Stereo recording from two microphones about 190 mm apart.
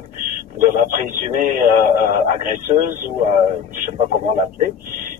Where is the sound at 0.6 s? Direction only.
45° right (ahead or behind).